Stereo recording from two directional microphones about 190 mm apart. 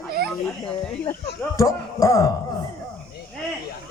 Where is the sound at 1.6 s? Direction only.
15° left (ahead or behind).